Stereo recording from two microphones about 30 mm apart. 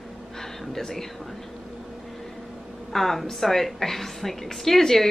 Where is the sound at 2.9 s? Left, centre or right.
Centre.